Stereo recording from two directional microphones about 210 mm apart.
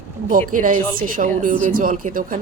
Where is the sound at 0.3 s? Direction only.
40° right (ahead or behind).